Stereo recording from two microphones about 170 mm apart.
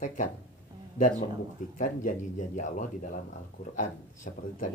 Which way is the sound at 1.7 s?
50° left (ahead or behind).